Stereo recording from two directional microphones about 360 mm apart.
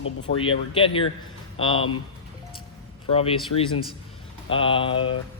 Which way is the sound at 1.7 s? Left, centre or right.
Left.